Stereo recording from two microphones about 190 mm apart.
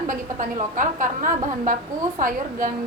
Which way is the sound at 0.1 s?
45° right (ahead or behind).